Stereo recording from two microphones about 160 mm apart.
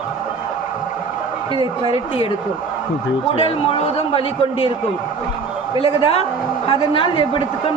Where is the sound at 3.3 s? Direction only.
40° left (ahead or behind).